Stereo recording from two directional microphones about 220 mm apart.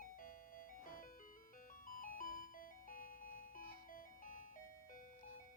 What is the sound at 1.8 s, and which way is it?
Music, 40° left (ahead or behind).